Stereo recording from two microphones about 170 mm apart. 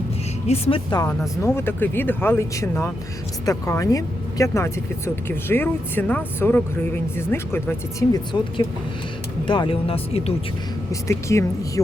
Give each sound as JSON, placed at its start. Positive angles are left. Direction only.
{"t": 0.4, "sound": "speech", "side_deg": 40}
{"t": 1.4, "sound": "speech", "side_deg": 15}
{"t": 11.1, "sound": "speech", "side_deg": 15}